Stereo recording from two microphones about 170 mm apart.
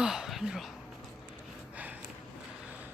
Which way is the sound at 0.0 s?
5° right (ahead or behind).